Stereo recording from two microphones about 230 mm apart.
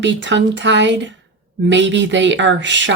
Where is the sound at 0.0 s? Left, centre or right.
Right.